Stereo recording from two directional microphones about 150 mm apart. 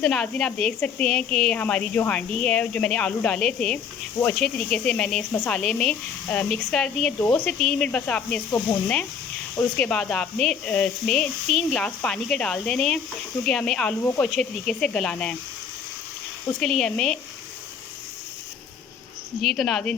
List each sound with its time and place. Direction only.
0.0 s speech: 5° left (ahead or behind)
9.6 s speech: 5° left (ahead or behind)
16.5 s speech: 5° left (ahead or behind)
19.4 s speech: centre (ahead or behind)